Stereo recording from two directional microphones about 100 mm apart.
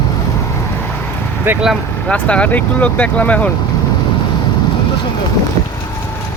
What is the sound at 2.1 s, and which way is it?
Speech, 10° left (ahead or behind).